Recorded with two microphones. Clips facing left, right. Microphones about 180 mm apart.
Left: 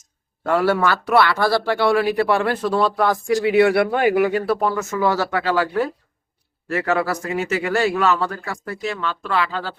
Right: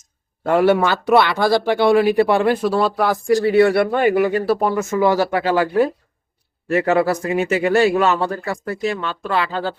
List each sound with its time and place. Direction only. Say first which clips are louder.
0.4 s speech: right 3 dB; 20° right (ahead or behind); by 4.5 s centre (ahead or behind)
4.5 s a man's voice: right 3 dB; 15° right (ahead or behind)